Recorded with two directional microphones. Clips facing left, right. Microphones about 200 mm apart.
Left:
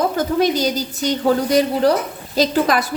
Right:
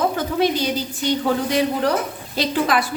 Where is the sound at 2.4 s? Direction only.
40° left (ahead or behind).